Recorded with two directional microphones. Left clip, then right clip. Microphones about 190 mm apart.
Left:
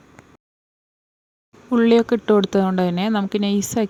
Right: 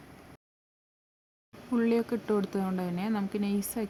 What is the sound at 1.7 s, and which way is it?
Speech, 40° left (ahead or behind).